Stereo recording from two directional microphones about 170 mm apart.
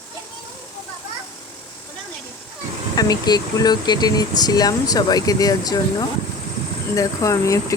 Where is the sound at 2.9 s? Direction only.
25° left (ahead or behind).